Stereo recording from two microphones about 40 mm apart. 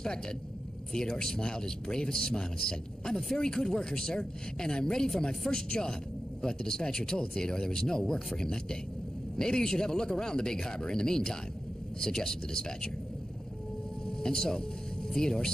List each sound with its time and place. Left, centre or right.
0.0 s a man's voice: centre
14.0 s speech: centre